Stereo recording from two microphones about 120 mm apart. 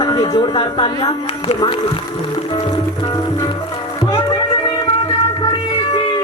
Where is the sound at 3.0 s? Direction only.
30° left (ahead or behind).